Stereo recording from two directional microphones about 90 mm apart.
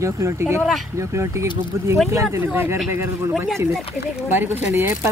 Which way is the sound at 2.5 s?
25° right (ahead or behind).